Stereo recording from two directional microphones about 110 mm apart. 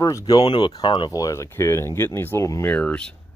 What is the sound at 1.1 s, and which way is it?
Speech, 30° left (ahead or behind).